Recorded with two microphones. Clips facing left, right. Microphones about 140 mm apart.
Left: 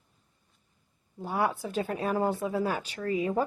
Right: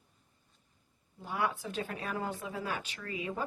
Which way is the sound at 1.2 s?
35° left (ahead or behind).